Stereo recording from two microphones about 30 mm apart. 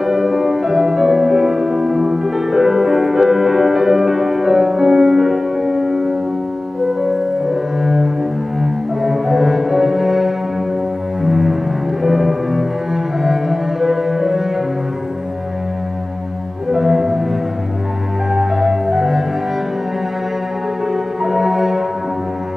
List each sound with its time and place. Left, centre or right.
0.0 s music: centre
7.8 s cello: centre
11.2 s music: centre
12.0 s cello: centre
16.7 s music: centre
18.3 s music: centre
20.9 s music: centre